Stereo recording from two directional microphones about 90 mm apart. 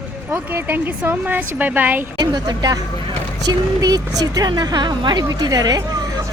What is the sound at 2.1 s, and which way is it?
A woman's voice, 50° right (ahead or behind).